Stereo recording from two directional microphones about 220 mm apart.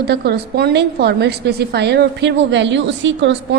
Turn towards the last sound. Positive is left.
turn(degrees=-55)  # may be behind; listen again after turning